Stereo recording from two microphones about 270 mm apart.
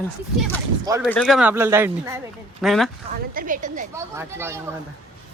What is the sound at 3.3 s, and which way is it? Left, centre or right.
Speech, right.